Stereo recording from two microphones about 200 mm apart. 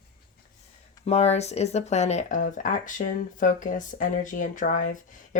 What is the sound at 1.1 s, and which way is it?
Speech, 30° left (ahead or behind).